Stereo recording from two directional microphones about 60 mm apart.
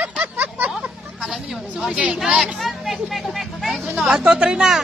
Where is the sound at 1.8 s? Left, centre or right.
Centre.